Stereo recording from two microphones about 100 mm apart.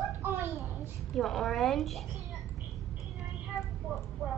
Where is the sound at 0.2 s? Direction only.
20° right (ahead or behind).